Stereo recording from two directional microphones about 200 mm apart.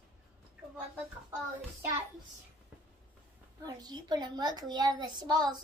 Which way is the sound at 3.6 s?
20° right (ahead or behind).